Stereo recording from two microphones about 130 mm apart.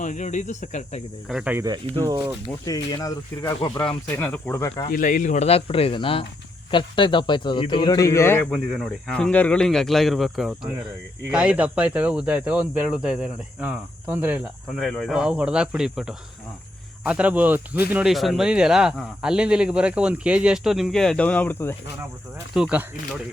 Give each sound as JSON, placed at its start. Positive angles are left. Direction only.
{"t": 0.0, "sound": "speech", "side_deg": 70}
{"t": 1.3, "sound": "speech", "side_deg": -5}
{"t": 1.6, "sound": "speech", "side_deg": -30}
{"t": 2.6, "sound": "speech", "side_deg": 30}
{"t": 3.8, "sound": "speech", "side_deg": 15}
{"t": 4.9, "sound": "a man's voice", "side_deg": 90}
{"t": 8.4, "sound": "speech", "side_deg": 0}
{"t": 14.8, "sound": "speech", "side_deg": 0}
{"t": 18.1, "sound": "speech", "side_deg": 0}
{"t": 22.5, "sound": "speech", "side_deg": -5}